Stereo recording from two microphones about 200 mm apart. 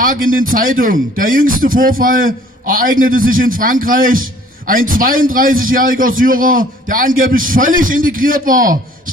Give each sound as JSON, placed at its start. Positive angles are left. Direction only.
{"t": 0.0, "sound": "a man's voice", "side_deg": -45}